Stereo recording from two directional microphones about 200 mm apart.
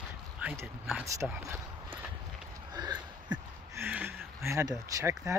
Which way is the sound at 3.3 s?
10° right (ahead or behind).